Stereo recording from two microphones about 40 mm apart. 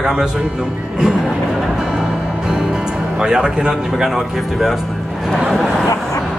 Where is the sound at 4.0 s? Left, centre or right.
Centre.